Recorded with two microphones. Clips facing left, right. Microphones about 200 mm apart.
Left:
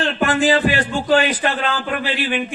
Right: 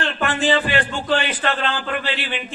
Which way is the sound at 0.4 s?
40° left (ahead or behind).